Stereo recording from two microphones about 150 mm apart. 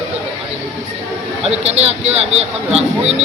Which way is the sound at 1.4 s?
45° right (ahead or behind).